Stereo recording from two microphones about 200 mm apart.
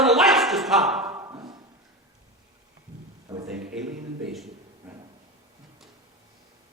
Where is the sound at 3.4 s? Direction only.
5° right (ahead or behind).